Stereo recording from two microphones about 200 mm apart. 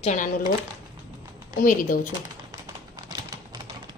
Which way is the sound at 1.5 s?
40° left (ahead or behind).